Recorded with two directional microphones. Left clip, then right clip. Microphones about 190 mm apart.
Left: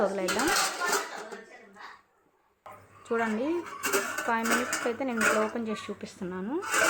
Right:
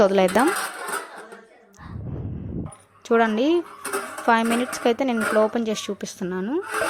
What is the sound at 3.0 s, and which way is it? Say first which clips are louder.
A woman's voice: right 10 dB; 40° right (ahead or behind).